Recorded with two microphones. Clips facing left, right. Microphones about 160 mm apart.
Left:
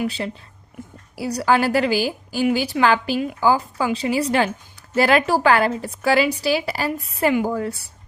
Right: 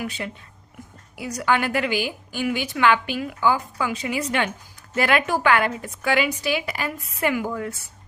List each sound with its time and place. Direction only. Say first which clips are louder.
0.0 s a woman's voice: left 5 dB; 30° left (ahead or behind)